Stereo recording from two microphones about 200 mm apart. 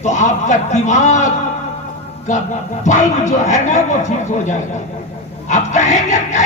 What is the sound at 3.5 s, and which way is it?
A man's voice, 35° left (ahead or behind).